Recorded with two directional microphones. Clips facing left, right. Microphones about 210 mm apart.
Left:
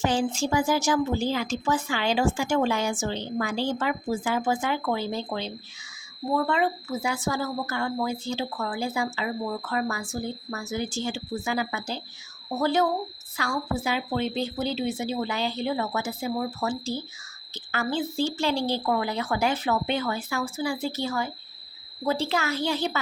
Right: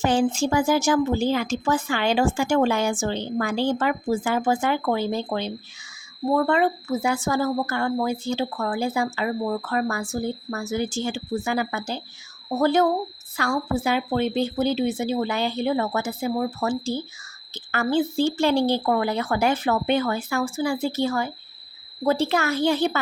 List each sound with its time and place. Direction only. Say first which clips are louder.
0.0 s a woman's voice: right 4 dB; 55° right (ahead or behind)